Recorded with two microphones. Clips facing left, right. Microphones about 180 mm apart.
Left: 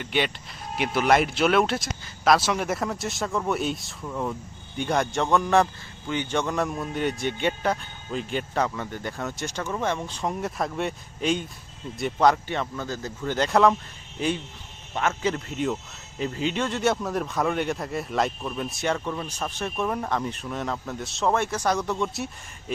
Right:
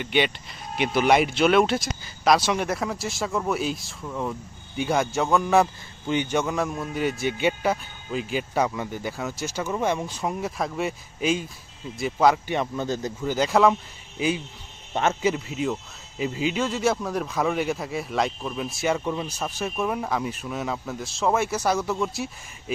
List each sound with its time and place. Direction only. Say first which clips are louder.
0.0 s speech: right 3 dB; centre (ahead or behind)
12.5 s speech: right 4 dB; 20° right (ahead or behind)
13.2 s speech: even; 5° right (ahead or behind)